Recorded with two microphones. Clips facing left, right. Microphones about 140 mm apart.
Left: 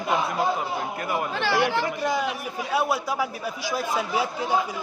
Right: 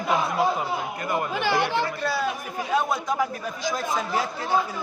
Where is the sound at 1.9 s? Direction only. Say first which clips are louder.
Left 1 dB; 15° left (ahead or behind).